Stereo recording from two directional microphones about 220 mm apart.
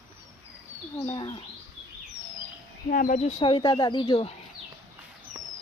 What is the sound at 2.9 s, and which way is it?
Speech, 35° left (ahead or behind).